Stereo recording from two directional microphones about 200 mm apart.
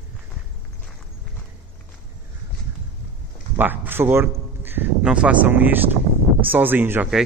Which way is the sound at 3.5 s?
10° right (ahead or behind).